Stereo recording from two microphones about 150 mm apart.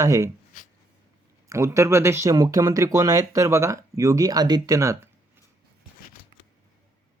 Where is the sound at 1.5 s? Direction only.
20° right (ahead or behind).